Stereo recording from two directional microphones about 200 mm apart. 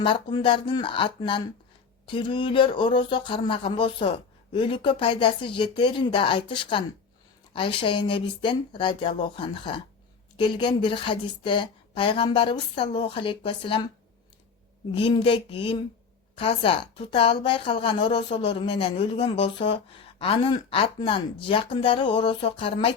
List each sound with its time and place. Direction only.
0.0 s speech: 25° left (ahead or behind)
14.9 s speech: 25° left (ahead or behind)